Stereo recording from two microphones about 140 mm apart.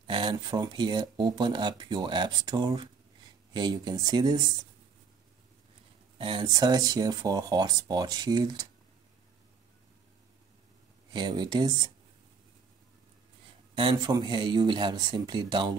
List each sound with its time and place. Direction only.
0.0 s speech: 35° right (ahead or behind)
6.1 s speech: 35° right (ahead or behind)
11.1 s speech: 30° right (ahead or behind)
13.7 s speech: 35° right (ahead or behind)